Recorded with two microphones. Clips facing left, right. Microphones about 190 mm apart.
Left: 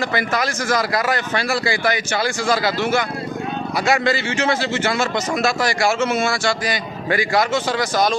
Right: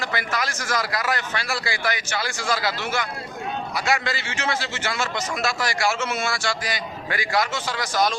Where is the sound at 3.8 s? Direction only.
25° left (ahead or behind).